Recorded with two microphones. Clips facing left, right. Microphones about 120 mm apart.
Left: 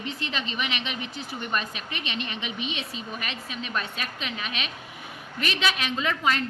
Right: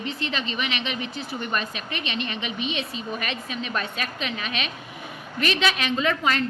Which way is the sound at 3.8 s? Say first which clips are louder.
Right 1 dB; 45° right (ahead or behind).